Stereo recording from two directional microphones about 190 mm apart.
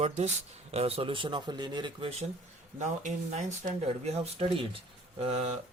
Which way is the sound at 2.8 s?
40° right (ahead or behind).